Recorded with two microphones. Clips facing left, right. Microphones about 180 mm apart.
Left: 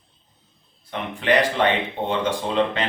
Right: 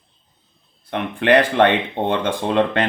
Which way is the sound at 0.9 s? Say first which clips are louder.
Right 5 dB; 60° right (ahead or behind).